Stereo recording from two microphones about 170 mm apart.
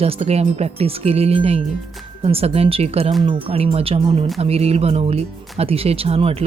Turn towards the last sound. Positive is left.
turn(degrees=-35)  # may be behind; listen again after turning